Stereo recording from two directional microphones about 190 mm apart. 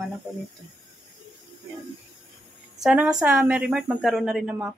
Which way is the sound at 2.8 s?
5° right (ahead or behind).